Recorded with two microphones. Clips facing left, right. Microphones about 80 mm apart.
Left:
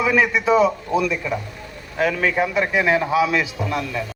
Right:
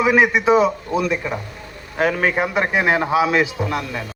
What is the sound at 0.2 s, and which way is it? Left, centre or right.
Speech, right.